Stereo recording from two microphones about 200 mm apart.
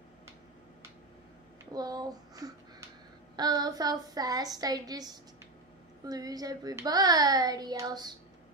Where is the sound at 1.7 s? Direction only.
20° right (ahead or behind).